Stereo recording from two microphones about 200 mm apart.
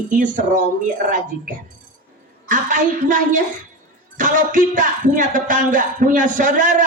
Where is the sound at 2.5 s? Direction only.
40° right (ahead or behind).